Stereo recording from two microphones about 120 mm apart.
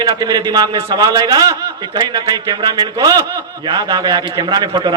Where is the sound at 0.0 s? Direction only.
35° right (ahead or behind).